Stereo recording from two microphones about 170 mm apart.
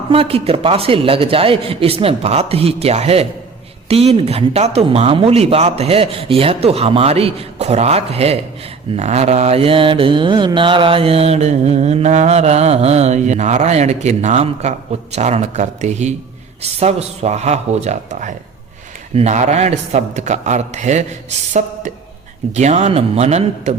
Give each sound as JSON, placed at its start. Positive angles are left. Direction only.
{"t": 0.1, "sound": "mantra", "side_deg": -35}
{"t": 19.1, "sound": "a man's voice", "side_deg": -40}
{"t": 22.5, "sound": "mantra", "side_deg": -40}